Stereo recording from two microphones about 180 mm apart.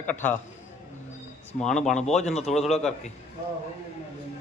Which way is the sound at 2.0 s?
40° left (ahead or behind).